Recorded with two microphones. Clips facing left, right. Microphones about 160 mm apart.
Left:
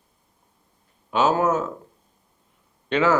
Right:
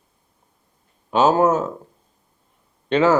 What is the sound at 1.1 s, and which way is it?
Speech, 35° right (ahead or behind).